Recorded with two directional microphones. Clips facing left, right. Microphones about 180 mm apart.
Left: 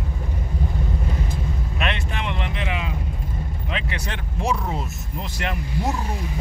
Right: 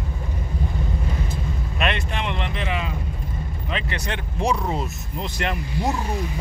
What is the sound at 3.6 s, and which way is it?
Speech, 10° left (ahead or behind).